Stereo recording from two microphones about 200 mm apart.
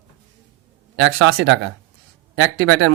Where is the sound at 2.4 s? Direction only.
80° right.